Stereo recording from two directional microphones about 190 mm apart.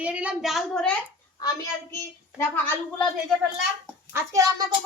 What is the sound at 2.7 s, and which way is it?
Speech, 5° left (ahead or behind).